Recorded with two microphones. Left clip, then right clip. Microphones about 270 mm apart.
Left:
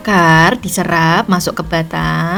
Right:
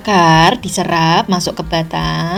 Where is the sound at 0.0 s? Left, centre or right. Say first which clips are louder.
Even; left.